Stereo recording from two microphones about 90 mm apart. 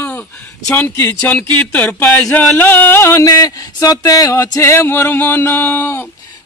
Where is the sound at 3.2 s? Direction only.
45° left (ahead or behind); by 6.1 s 25° left (ahead or behind).